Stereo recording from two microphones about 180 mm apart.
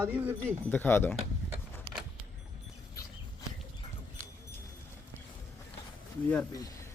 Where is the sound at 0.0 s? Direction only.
10° right (ahead or behind).